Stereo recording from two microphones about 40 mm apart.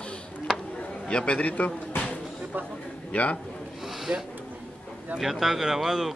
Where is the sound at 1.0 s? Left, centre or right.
Left.